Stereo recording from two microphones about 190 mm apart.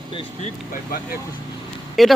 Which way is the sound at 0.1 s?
25° left (ahead or behind).